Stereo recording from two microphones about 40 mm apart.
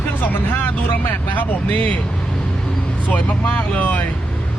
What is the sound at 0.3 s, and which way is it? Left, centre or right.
Speech, left.